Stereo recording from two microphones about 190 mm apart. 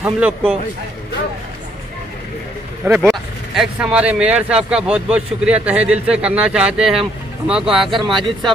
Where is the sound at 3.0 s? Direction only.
Centre (ahead or behind).